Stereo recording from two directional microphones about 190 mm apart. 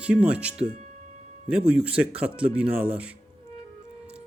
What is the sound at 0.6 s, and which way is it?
Speech, 35° right (ahead or behind).